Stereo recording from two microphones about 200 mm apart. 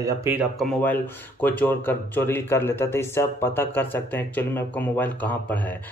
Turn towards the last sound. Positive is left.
turn(degrees=10)  # may be behind; listen again after turning